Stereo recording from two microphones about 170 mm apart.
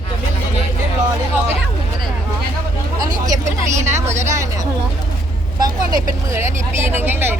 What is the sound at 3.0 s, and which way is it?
Speech, 20° right (ahead or behind).